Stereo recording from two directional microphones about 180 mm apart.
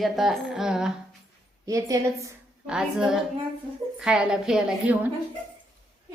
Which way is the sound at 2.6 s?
5° right (ahead or behind).